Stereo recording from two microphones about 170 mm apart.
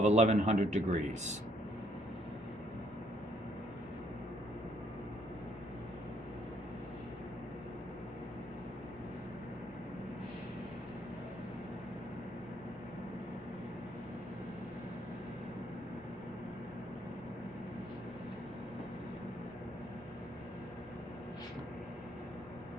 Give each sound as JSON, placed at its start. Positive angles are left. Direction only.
{"t": 0.0, "sound": "speech", "side_deg": -40}